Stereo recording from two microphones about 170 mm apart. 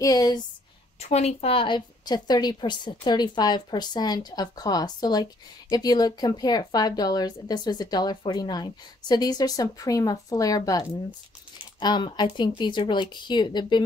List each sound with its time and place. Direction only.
0.0 s a woman's voice: 20° left (ahead or behind)
0.9 s a woman's voice: 40° left (ahead or behind)